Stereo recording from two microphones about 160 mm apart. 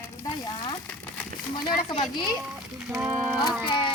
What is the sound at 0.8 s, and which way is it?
Crumpling, 10° left (ahead or behind).